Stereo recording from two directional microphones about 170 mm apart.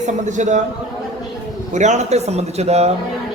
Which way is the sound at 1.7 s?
45° right (ahead or behind).